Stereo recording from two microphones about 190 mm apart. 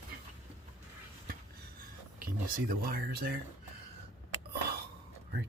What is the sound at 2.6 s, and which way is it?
Speech, 50° right (ahead or behind).